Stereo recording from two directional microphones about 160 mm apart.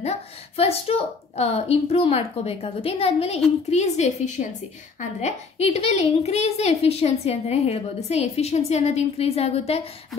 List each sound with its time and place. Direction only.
0.6 s a woman's voice: 40° left (ahead or behind)
5.2 s a woman's voice: 40° left (ahead or behind)